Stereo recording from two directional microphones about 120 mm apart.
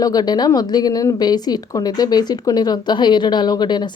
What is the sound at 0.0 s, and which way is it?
A woman's voice, 35° left (ahead or behind).